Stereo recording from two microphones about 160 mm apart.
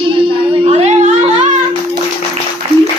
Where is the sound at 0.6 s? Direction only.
45° right (ahead or behind).